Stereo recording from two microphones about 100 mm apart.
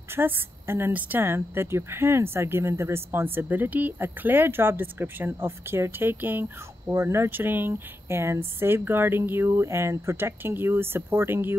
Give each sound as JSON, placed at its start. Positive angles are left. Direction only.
{"t": 0.1, "sound": "a woman's voice", "side_deg": -25}